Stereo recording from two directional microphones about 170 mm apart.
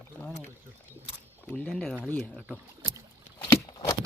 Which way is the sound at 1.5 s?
5° left (ahead or behind).